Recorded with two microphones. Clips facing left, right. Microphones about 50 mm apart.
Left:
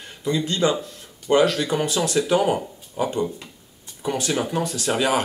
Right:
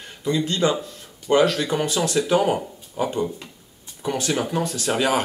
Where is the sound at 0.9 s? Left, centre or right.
Centre.